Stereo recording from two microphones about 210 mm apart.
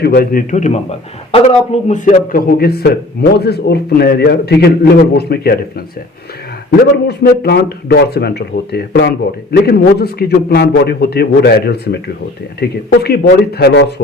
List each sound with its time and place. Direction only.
0.0 s a man's voice: 50° left (ahead or behind)
7.1 s speech: 50° left (ahead or behind)